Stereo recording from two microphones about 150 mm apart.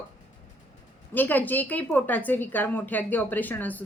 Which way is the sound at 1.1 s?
10° left (ahead or behind).